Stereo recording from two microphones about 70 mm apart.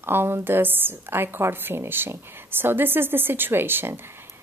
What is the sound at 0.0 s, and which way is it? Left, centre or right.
A woman's voice, right.